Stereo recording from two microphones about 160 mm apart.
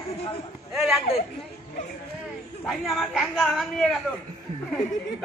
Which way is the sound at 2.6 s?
Centre (ahead or behind).